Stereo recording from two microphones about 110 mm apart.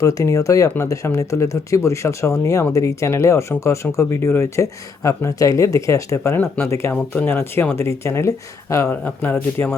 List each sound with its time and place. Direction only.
0.0 s speech: 30° left (ahead or behind)